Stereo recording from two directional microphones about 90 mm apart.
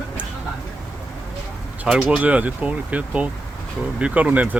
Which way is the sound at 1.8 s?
10° right (ahead or behind).